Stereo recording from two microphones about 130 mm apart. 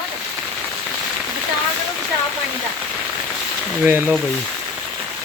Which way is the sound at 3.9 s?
15° right (ahead or behind).